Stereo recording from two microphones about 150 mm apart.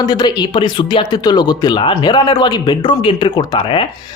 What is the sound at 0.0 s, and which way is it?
Speech, 25° left (ahead or behind).